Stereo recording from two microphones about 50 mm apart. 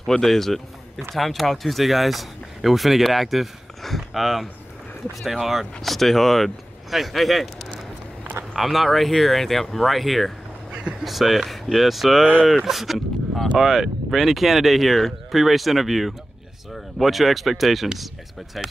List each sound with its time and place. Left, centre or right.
0.0 s speech: centre
8.5 s speech: centre
10.7 s a sound: right
11.1 s speech: centre